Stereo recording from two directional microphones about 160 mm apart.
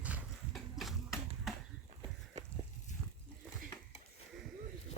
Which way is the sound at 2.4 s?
45° right (ahead or behind).